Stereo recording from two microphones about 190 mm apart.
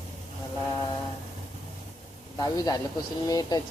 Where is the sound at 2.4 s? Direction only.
20° left (ahead or behind).